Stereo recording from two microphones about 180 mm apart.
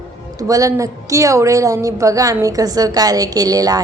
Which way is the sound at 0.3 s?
20° right (ahead or behind).